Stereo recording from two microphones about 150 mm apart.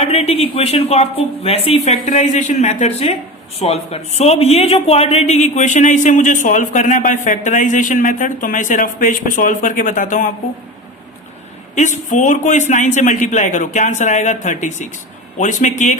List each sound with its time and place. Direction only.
0.0 s a man's voice: 45° left (ahead or behind); by 10.3 s 60° left (ahead or behind)
11.7 s a man's voice: 55° left (ahead or behind)